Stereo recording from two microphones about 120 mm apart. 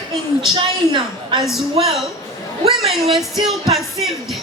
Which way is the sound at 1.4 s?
Centre (ahead or behind).